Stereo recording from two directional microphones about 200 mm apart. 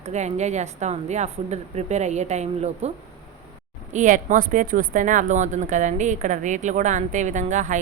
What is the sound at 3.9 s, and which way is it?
Speech, 40° right (ahead or behind).